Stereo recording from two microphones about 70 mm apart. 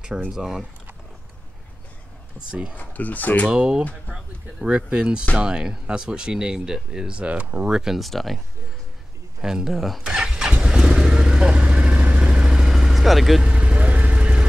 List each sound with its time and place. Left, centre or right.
0.3 s speech: centre
2.3 s speech: centre
2.8 s speech: left
3.4 s speech: centre
9.4 s speech: centre
10.0 s vehicle: centre
13.4 s vehicle: centre